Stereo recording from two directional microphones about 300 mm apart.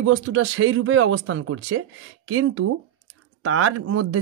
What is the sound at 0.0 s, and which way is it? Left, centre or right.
Speech, right.